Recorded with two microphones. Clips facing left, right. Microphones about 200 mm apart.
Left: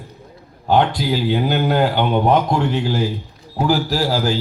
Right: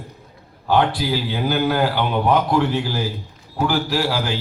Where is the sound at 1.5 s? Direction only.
25° left (ahead or behind).